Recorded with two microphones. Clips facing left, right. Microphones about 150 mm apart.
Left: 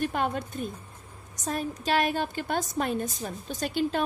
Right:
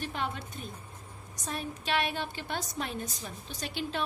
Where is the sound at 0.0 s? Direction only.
50° left (ahead or behind).